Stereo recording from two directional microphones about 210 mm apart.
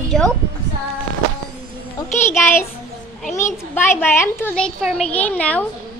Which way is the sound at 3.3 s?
35° left (ahead or behind).